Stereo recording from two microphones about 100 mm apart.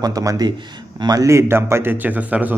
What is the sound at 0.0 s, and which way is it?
Speech, 35° right (ahead or behind).